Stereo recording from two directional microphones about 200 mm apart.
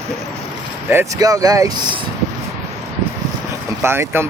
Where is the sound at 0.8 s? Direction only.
15° right (ahead or behind).